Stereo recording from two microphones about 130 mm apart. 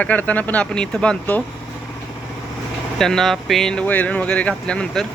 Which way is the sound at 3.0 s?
5° left (ahead or behind).